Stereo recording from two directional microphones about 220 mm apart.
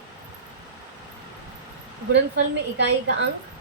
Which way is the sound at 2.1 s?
55° right (ahead or behind).